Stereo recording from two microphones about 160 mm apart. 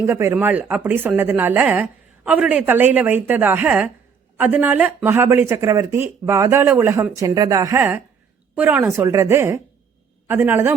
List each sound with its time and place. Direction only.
0.0 s speech: 15° right (ahead or behind)